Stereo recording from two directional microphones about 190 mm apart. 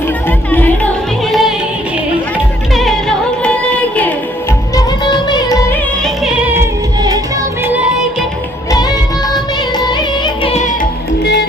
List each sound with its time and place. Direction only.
0.3 s music: 10° left (ahead or behind)
3.4 s music: 5° left (ahead or behind)
4.7 s music: 20° left (ahead or behind)
6.2 s music: 10° right (ahead or behind)
8.7 s music: 20° left (ahead or behind)
11.2 s music: 60° left (ahead or behind)